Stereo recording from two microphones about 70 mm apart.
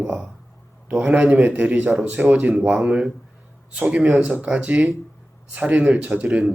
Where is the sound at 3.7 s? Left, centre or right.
Centre.